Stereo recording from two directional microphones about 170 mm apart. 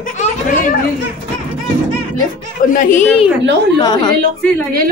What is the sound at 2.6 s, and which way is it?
Speech, 50° left (ahead or behind).